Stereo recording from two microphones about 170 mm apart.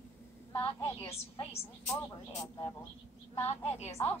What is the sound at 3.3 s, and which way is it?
Speech, 40° left (ahead or behind).